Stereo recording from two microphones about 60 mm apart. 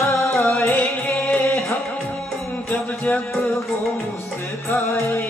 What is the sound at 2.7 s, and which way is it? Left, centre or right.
Music, left.